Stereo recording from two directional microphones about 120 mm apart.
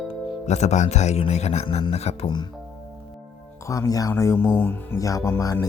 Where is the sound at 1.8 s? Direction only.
55° left (ahead or behind).